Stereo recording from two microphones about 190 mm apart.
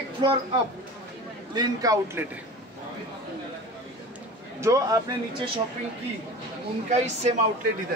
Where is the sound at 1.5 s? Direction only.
20° right (ahead or behind).